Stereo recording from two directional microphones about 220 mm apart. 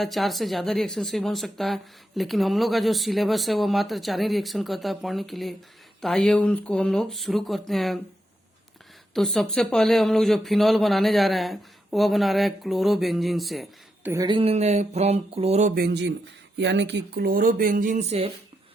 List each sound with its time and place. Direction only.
0.0 s a woman's voice: centre (ahead or behind)
9.1 s a woman's voice: centre (ahead or behind)
14.1 s speech: 20° right (ahead or behind)
15.7 s speech: 50° right (ahead or behind); by 18.3 s 30° right (ahead or behind)